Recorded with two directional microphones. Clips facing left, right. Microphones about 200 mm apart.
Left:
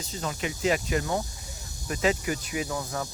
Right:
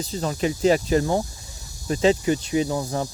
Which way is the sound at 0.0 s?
35° right (ahead or behind).